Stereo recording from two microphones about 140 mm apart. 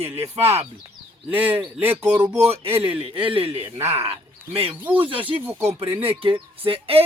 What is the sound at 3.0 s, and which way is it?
Speech, 40° right (ahead or behind).